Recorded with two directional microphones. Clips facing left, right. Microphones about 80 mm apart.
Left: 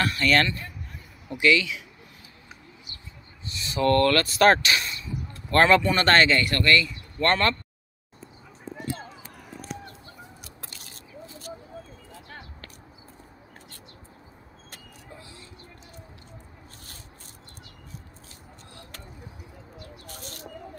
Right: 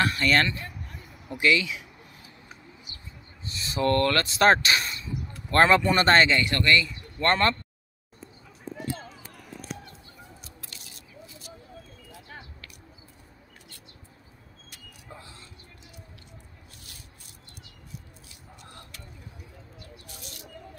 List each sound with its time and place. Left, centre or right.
0.3 s speech: right
3.6 s a sound: right
3.9 s speech: right
4.6 s a sound: right
5.5 s speech: right
10.4 s biting: left
20.1 s bird: left